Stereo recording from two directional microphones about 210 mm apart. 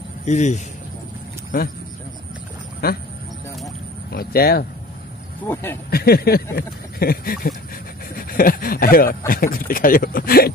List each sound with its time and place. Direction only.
0.2 s speech: 35° left (ahead or behind)
2.8 s speech: 45° left (ahead or behind)
4.1 s speech: 45° left (ahead or behind)
5.5 s speech: 10° left (ahead or behind)
5.9 s speech: 45° left (ahead or behind)